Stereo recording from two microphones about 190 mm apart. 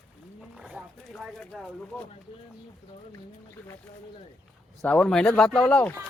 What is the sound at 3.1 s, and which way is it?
Speech, 15° left (ahead or behind).